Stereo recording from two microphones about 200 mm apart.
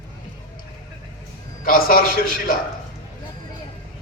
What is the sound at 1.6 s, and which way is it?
Speech, 45° left (ahead or behind).